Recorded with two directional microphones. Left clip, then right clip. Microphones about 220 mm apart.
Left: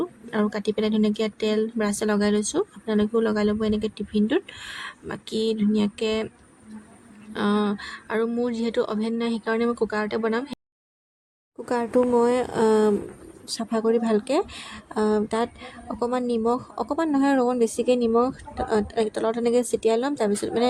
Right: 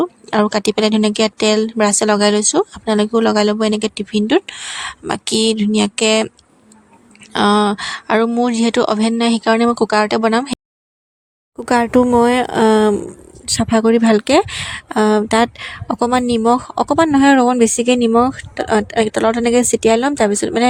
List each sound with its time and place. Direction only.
0.0 s speech: 30° right (ahead or behind)
7.3 s speech: 30° right (ahead or behind)
11.5 s speech: 40° right (ahead or behind)